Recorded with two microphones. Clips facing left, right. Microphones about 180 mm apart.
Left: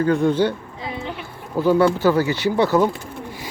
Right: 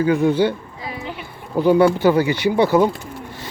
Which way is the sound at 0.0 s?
5° right (ahead or behind).